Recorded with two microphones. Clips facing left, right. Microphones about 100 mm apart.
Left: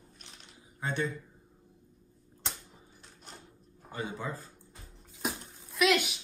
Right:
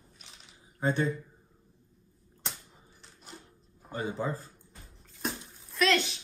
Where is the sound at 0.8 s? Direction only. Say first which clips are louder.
Right 5 dB; 35° right (ahead or behind).